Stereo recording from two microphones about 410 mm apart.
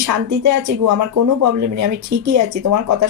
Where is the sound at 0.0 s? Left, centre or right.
Right.